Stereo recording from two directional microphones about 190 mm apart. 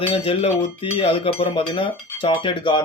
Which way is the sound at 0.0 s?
30° left (ahead or behind).